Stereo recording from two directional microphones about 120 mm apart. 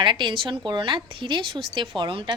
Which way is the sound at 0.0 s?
40° right (ahead or behind).